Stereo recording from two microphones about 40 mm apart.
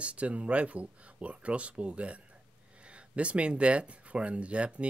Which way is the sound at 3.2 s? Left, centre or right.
Right.